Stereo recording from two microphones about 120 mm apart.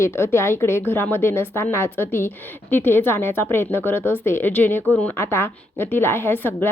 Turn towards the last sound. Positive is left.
turn(degrees=20)  # may be behind; listen again after turning